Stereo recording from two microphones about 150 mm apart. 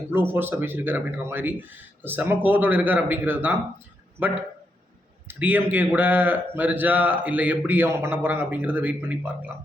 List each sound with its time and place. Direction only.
0.1 s a man's voice: 15° right (ahead or behind)